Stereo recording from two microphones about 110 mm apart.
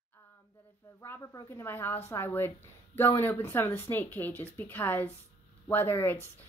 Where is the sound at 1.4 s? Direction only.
20° left (ahead or behind).